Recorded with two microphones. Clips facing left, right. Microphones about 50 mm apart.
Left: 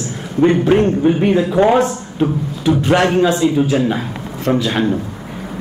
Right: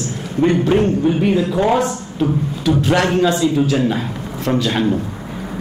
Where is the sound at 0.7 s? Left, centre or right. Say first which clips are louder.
Left 2 dB; left.